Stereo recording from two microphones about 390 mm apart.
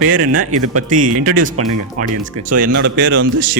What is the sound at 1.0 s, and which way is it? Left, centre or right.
Speech, centre.